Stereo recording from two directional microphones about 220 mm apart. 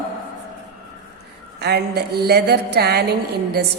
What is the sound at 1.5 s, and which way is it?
A woman's voice, 50° right (ahead or behind).